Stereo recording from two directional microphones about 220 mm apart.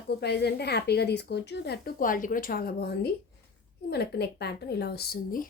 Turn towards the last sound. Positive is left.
turn(degrees=45)  # may be behind; listen again after turning